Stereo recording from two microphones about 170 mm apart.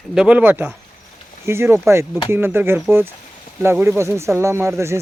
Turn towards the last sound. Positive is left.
turn(degrees=-15)  # may be behind; listen again after turning